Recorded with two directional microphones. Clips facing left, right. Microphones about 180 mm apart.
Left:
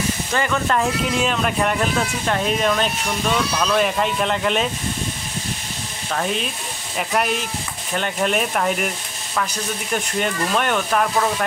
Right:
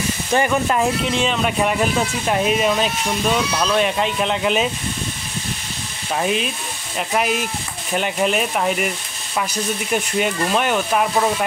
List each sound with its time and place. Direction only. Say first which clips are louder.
0.3 s speech: right 4 dB; 20° right (ahead or behind)
1.0 s speech: right 1 dB; centre (ahead or behind); by 3.6 s 15° right (ahead or behind)
3.6 s speech: even; centre (ahead or behind)
6.1 s speech: right 3 dB; 10° right (ahead or behind)
9.9 s speech: right 2 dB; 5° right (ahead or behind)